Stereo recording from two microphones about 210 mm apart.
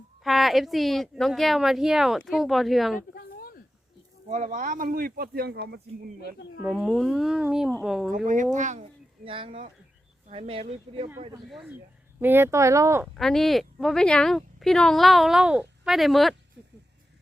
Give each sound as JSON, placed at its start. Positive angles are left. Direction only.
{"t": 0.3, "sound": "speech", "side_deg": 0}
{"t": 3.2, "sound": "a sound", "side_deg": 45}
{"t": 4.3, "sound": "speech", "side_deg": -35}
{"t": 6.6, "sound": "speech", "side_deg": 0}
{"t": 8.1, "sound": "speech", "side_deg": -40}
{"t": 9.2, "sound": "speech", "side_deg": -25}
{"t": 11.4, "sound": "speech", "side_deg": -5}
{"t": 13.1, "sound": "speech", "side_deg": 0}